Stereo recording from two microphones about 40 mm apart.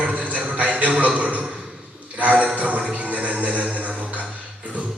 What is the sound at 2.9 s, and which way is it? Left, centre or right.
Music, right.